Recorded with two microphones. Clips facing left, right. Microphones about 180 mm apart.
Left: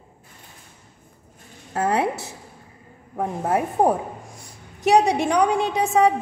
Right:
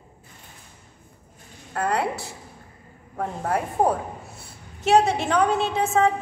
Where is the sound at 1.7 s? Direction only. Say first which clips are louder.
Left 3 dB; 25° left (ahead or behind).